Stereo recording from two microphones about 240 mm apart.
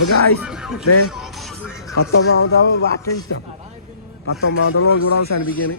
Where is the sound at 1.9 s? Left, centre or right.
Left.